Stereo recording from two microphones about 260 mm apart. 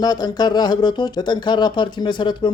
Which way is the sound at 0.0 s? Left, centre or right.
Centre.